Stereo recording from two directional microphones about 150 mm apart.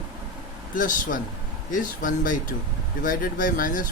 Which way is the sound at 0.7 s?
60° left (ahead or behind).